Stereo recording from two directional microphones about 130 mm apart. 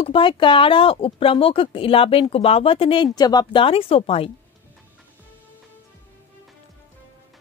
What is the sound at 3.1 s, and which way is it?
Speech, 30° left (ahead or behind).